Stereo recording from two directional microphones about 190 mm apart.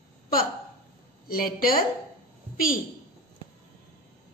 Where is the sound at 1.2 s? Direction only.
50° left (ahead or behind).